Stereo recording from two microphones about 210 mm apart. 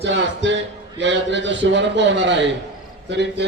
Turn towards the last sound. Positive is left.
turn(degrees=-55)  # may be behind; listen again after turning